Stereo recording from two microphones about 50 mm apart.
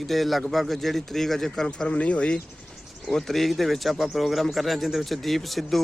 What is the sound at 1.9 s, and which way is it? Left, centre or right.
Speech, left.